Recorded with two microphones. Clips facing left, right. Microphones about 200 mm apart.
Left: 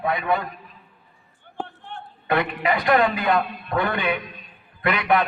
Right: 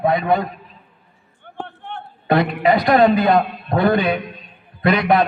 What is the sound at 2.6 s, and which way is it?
A man's voice, 35° right (ahead or behind).